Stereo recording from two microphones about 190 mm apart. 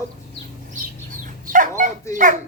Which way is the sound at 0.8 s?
40° right (ahead or behind).